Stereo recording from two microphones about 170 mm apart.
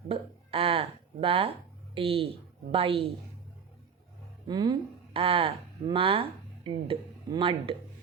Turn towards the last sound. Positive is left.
turn(degrees=-30)  # may be behind; listen again after turning